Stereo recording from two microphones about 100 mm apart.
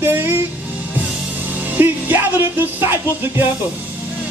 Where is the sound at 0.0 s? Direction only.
20° right (ahead or behind).